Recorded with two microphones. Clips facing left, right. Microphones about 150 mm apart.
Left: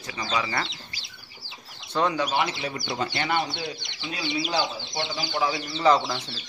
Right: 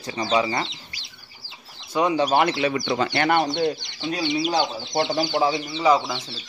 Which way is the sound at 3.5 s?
45° right (ahead or behind).